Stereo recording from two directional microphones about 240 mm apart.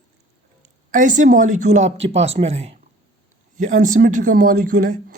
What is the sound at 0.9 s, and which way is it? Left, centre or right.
Speech, right.